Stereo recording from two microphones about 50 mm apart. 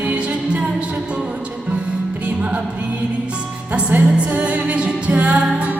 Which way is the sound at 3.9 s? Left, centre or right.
Right.